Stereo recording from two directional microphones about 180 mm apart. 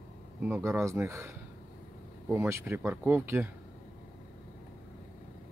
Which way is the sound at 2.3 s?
15° right (ahead or behind).